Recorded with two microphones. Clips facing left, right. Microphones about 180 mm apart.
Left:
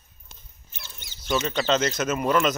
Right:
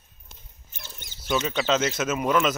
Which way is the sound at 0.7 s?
50° right (ahead or behind).